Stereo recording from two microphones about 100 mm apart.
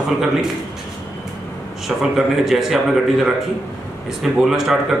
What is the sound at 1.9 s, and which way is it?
Speech, 5° right (ahead or behind).